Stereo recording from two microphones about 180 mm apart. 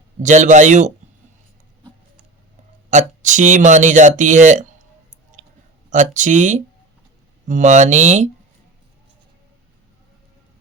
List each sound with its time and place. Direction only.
0.2 s speech: 40° right (ahead or behind)
2.9 s speech: 45° right (ahead or behind)
5.9 s speech: 45° right (ahead or behind)